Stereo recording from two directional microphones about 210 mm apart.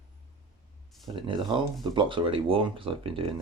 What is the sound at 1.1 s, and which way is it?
Speech, 25° right (ahead or behind).